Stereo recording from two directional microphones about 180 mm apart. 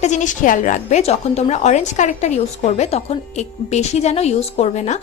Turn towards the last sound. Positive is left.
turn(degrees=40)  # may be behind; listen again after turning